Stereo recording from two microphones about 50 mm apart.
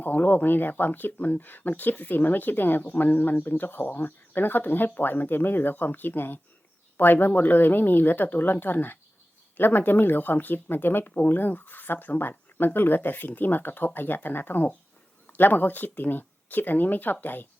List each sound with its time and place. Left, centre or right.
0.0 s speech: left